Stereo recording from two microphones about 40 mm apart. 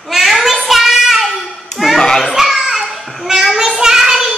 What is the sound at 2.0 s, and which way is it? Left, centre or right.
Children playing, centre.